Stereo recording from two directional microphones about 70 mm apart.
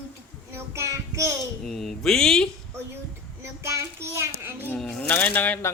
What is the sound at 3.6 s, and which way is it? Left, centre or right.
Child singing, right.